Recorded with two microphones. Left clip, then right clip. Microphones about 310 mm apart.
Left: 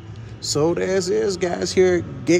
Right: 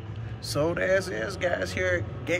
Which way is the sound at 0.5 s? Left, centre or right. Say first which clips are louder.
Left 5 dB; centre.